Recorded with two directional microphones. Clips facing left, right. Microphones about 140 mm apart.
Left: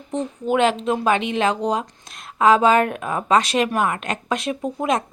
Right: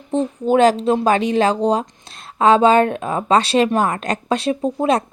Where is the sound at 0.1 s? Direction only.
30° right (ahead or behind).